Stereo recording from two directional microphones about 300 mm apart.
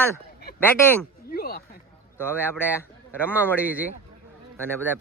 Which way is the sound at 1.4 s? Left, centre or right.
Left.